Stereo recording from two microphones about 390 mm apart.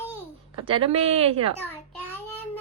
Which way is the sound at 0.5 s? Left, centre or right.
Centre.